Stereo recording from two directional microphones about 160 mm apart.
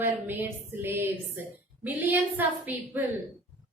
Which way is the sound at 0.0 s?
10° right (ahead or behind).